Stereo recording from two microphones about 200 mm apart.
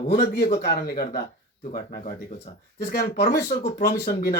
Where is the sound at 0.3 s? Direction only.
55° left (ahead or behind).